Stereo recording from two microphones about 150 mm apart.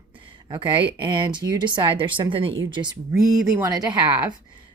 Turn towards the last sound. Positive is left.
turn(degrees=-30)  # may be behind; listen again after turning